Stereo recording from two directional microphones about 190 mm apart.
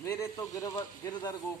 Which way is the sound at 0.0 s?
15° left (ahead or behind).